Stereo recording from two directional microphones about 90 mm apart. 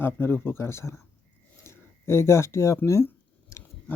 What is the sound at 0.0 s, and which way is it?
Speech, 25° left (ahead or behind).